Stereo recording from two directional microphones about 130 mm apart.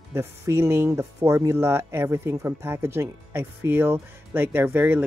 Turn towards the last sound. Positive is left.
turn(degrees=-15)  # may be behind; listen again after turning